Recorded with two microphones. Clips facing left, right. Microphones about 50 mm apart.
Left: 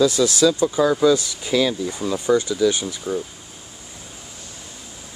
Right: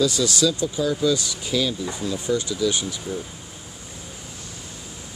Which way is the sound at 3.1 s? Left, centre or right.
Left.